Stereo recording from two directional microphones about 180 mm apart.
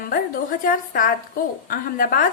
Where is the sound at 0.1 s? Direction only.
50° left (ahead or behind).